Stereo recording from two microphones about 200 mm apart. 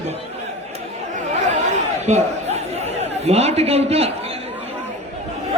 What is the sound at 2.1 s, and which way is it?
Speech, 35° right (ahead or behind).